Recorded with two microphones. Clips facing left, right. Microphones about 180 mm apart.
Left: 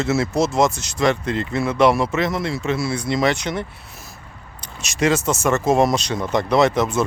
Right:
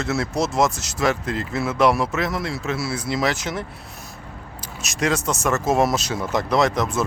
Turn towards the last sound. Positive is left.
turn(degrees=0)  # may be behind; listen again after turning